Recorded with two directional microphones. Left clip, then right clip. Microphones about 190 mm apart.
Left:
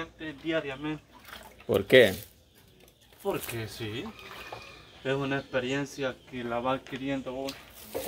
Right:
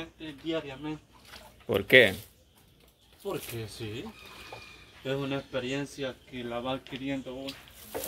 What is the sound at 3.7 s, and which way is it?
Speech, 10° left (ahead or behind).